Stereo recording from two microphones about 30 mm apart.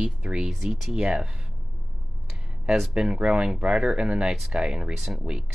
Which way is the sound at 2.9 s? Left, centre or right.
Right.